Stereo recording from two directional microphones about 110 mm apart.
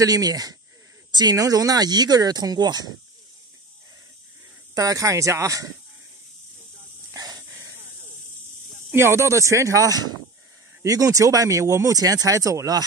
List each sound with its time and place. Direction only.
0.0 s speech: 35° right (ahead or behind)
4.7 s speech: 30° right (ahead or behind)
7.2 s dog: 35° right (ahead or behind)
8.9 s speech: 25° right (ahead or behind)